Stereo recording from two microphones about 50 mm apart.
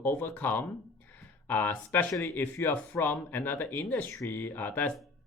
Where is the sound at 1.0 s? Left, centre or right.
Left.